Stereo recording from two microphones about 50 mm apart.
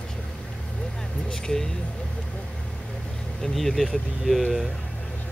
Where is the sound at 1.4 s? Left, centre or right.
Centre.